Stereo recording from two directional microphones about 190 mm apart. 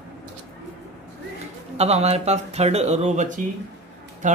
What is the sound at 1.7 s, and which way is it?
Speech, 35° right (ahead or behind).